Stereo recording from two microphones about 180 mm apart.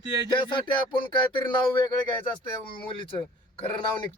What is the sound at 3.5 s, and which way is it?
Speech, 25° left (ahead or behind).